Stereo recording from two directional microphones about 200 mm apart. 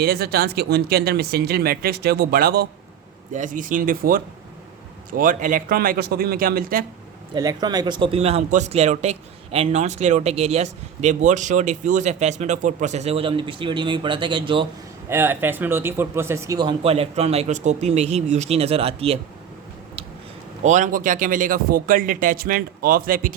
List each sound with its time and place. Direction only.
0.0 s speech: 50° right (ahead or behind)
7.3 s speech: 20° right (ahead or behind)
15.1 s speech: 10° right (ahead or behind); by 19.2 s 30° right (ahead or behind)
20.7 s speech: 35° right (ahead or behind)